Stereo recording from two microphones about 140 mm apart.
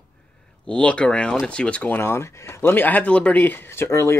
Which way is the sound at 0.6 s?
10° left (ahead or behind).